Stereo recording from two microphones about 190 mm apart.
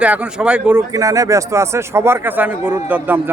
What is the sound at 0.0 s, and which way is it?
Speech, 5° right (ahead or behind).